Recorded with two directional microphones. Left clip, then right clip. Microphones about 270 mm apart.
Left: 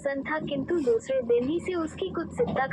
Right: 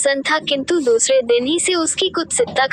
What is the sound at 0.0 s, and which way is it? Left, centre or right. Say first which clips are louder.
A woman's voice: right 13 dB; right.